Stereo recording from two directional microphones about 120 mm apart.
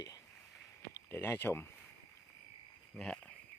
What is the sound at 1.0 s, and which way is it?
Speech, 20° left (ahead or behind).